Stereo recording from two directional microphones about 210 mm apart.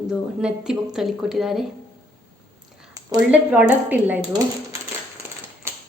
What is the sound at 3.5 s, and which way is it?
A woman's voice, 5° right (ahead or behind).